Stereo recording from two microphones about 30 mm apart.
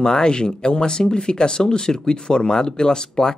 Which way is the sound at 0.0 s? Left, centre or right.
Left.